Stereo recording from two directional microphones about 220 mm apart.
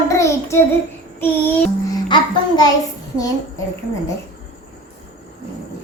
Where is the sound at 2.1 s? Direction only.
20° left (ahead or behind).